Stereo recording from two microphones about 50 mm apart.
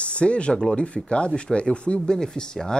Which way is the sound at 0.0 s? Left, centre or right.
Left.